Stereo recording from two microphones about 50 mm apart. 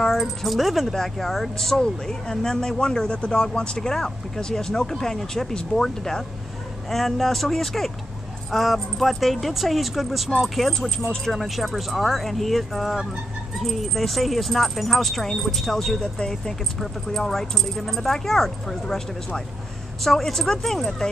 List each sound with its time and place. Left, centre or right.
0.0 s speech: centre
16.0 s speech: centre